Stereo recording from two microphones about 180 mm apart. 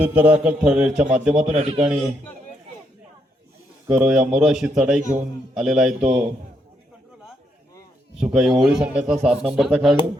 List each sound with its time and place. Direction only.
0.0 s a man's voice: 10° right (ahead or behind)
1.5 s a man's voice: 35° right (ahead or behind)
3.8 s a man's voice: 5° right (ahead or behind)
8.2 s a man's voice: 5° right (ahead or behind)